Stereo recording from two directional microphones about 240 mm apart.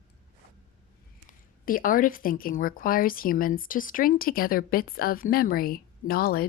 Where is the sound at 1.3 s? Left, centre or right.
Left.